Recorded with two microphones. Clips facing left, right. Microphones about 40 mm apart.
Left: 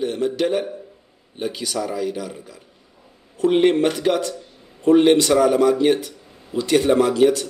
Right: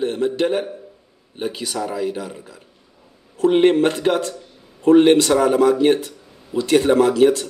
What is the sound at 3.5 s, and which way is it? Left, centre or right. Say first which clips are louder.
Speech: right 2 dB; centre.